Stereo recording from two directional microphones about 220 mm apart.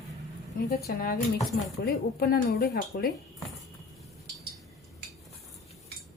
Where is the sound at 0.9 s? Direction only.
40° left (ahead or behind).